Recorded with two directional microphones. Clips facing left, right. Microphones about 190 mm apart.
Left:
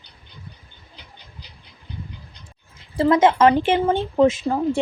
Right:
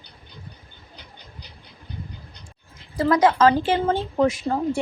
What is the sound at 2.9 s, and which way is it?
A woman's voice, 25° left (ahead or behind).